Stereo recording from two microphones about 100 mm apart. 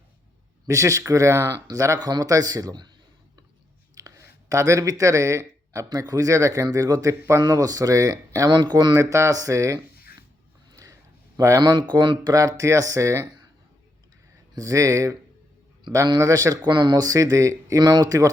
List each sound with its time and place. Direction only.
0.7 s speech: 30° right (ahead or behind)
3.9 s speech: 35° right (ahead or behind)
8.4 s speech: 50° right (ahead or behind); by 9.8 s 30° right (ahead or behind)
10.7 s a sound: 35° right (ahead or behind)
11.3 s speech: 35° right (ahead or behind); by 12.3 s 50° right (ahead or behind)
12.3 s speech: 35° right (ahead or behind)
14.5 s speech: 35° right (ahead or behind)
16.2 s speech: 35° right (ahead or behind)
16.6 s speech: 45° right (ahead or behind)